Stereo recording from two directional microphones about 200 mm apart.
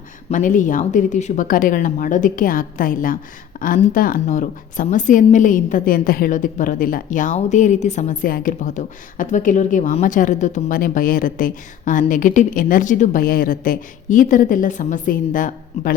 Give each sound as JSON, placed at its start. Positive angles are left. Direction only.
{"t": 0.3, "sound": "a woman's voice", "side_deg": 40}